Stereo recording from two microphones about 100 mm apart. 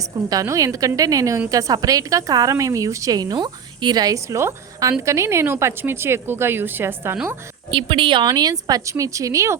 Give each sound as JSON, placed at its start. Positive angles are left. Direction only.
{"t": 0.3, "sound": "a woman's voice", "side_deg": -35}
{"t": 3.3, "sound": "a woman's voice", "side_deg": -50}
{"t": 7.7, "sound": "speech", "side_deg": -60}
{"t": 8.3, "sound": "a woman's voice", "side_deg": -40}